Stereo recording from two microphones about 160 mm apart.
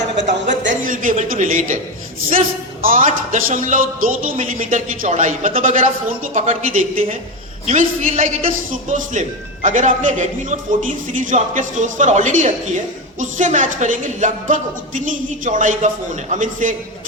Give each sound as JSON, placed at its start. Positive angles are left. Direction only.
{"t": 0.3, "sound": "a man's voice", "side_deg": -50}
{"t": 2.8, "sound": "music", "side_deg": -60}
{"t": 4.5, "sound": "a man's voice", "side_deg": -50}